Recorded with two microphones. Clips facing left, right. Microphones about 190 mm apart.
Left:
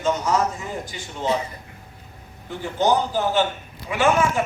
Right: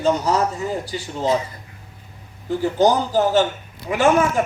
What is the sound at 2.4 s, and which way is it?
A man's voice, 40° right (ahead or behind).